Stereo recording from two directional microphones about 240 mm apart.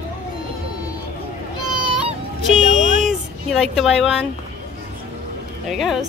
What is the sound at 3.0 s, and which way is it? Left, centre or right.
Speech, centre.